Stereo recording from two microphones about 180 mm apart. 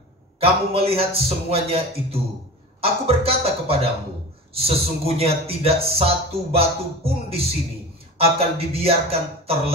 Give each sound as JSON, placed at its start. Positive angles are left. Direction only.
{"t": 0.4, "sound": "speech", "side_deg": -35}